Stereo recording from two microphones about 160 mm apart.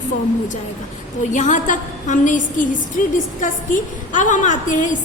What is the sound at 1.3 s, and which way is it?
A woman's voice, 50° left (ahead or behind).